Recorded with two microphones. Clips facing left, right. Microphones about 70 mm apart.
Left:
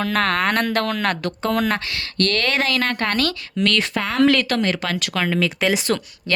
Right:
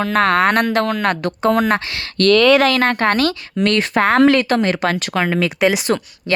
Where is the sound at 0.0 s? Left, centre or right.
Centre.